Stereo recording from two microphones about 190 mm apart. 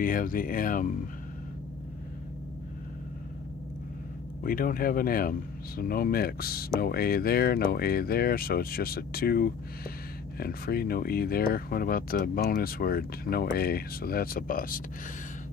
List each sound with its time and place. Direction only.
0.0 s speech: 45° left (ahead or behind)
4.4 s speech: 50° left (ahead or behind)